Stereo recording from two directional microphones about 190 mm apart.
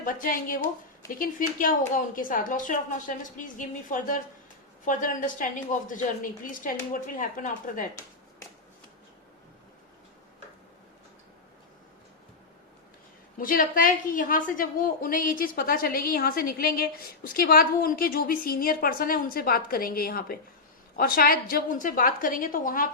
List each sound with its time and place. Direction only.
0.0 s a woman's voice: 45° left (ahead or behind)
13.4 s a woman's voice: 45° left (ahead or behind)